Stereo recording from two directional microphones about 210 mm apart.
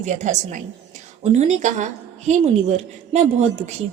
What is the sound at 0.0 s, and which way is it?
A woman's voice, 35° right (ahead or behind).